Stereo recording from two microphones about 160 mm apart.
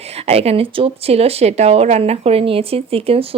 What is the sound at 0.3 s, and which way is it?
Speech, 40° right (ahead or behind).